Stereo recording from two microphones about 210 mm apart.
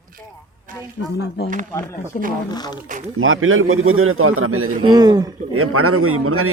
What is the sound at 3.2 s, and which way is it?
A man's voice, 75° right (ahead or behind).